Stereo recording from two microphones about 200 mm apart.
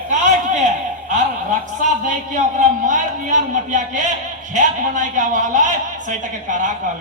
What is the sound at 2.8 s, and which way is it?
Speech, 40° right (ahead or behind).